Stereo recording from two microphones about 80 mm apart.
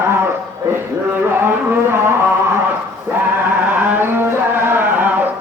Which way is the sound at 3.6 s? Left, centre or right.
Right.